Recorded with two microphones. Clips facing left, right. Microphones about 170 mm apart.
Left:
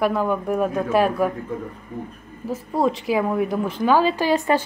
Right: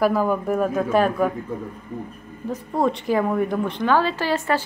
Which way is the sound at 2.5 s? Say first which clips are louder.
Left 1 dB; centre (ahead or behind).